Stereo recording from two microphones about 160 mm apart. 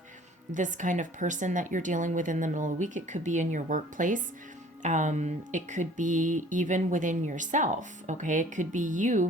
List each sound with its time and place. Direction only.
0.5 s speech: 50° right (ahead or behind)